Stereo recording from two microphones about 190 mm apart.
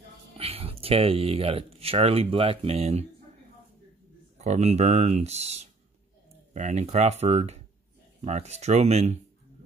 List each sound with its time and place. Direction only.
0.4 s speech: 30° right (ahead or behind)
4.4 s speech: 35° right (ahead or behind)